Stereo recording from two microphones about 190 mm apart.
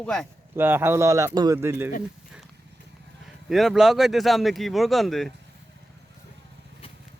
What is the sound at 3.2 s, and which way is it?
Speech, centre (ahead or behind).